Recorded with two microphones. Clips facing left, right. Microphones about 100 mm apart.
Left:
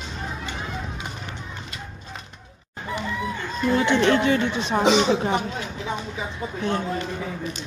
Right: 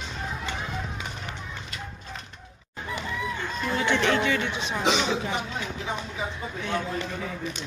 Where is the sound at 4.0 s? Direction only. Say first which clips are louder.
Left 5 dB; 35° left (ahead or behind).